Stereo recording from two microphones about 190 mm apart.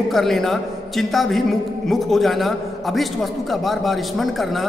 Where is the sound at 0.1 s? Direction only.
Centre (ahead or behind).